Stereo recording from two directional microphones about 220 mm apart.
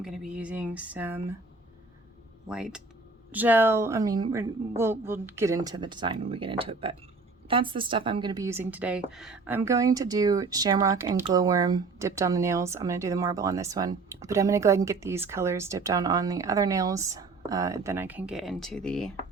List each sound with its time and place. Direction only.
0.0 s speech: 5° right (ahead or behind)
2.5 s speech: 5° right (ahead or behind)